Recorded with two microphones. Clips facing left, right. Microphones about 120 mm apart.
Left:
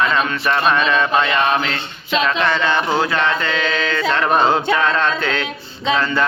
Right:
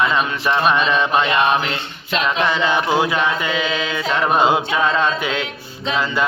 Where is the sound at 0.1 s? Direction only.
15° right (ahead or behind).